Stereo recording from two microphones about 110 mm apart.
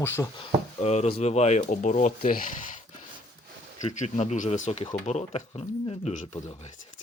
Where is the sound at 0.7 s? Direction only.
90° left.